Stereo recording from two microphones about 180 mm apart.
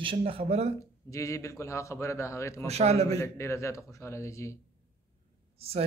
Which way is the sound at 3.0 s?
15° left (ahead or behind).